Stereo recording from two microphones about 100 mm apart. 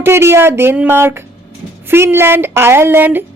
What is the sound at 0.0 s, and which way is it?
Speech, 25° right (ahead or behind).